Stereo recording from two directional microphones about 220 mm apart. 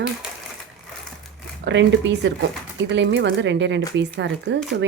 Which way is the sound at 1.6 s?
55° right (ahead or behind).